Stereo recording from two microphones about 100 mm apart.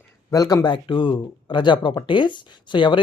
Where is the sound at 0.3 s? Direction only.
35° left (ahead or behind).